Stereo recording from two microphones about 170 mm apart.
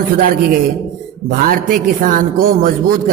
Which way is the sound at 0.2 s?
60° right (ahead or behind).